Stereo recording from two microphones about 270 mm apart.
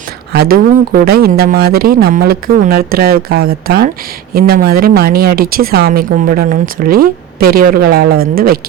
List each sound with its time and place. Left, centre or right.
0.3 s speech: right